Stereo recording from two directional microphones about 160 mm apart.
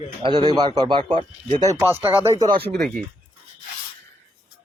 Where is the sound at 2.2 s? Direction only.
20° right (ahead or behind).